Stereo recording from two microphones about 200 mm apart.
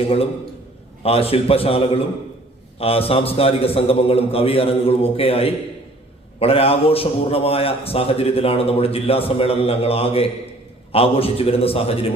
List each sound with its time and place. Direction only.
1.0 s a man's voice: 30° left (ahead or behind)